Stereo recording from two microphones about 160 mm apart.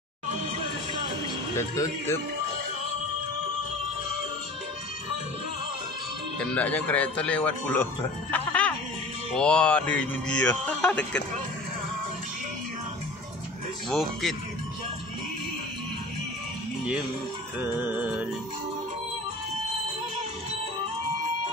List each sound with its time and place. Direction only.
1.6 s speech: 15° left (ahead or behind)
6.4 s speech: 10° left (ahead or behind)
13.8 s speech: centre (ahead or behind)
17.6 s music: 10° right (ahead or behind)